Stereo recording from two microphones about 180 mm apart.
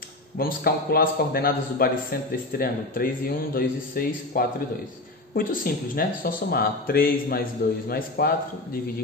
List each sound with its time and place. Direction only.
0.4 s speech: 55° left (ahead or behind)